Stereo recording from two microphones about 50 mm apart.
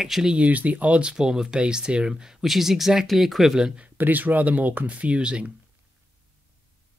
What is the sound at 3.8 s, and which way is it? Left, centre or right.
Speech, right.